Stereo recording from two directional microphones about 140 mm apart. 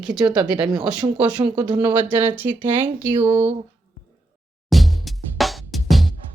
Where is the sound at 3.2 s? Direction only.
45° right (ahead or behind).